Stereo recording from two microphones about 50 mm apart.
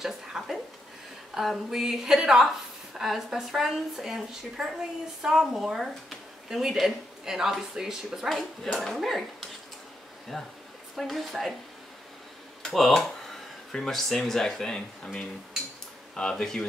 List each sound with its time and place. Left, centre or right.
0.0 s a woman's voice: centre
8.3 s a woman's voice: centre
12.6 s speech: centre
16.2 s speech: centre